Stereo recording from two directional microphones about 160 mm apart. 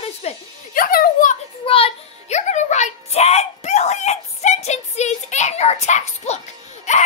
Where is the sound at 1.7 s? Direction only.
40° left (ahead or behind).